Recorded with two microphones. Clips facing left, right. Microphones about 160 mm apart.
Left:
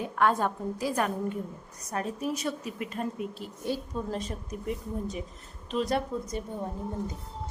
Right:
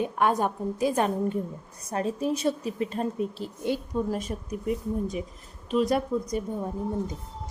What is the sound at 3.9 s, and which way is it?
Speech, 15° right (ahead or behind).